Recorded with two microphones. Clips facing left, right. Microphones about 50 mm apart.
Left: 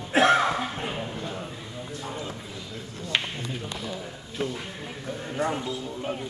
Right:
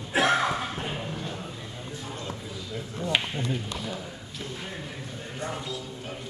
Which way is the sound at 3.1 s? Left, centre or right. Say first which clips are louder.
Even; centre.